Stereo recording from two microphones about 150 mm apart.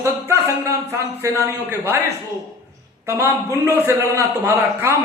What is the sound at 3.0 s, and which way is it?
A man's voice, 20° right (ahead or behind).